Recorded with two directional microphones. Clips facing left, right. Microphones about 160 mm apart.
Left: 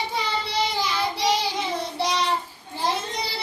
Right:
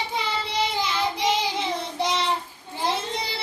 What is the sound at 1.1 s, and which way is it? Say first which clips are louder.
Child singing: left 1 dB; 20° right (ahead or behind).